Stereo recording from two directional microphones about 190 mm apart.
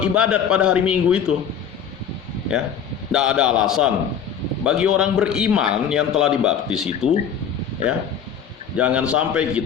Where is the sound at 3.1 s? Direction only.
5° right (ahead or behind).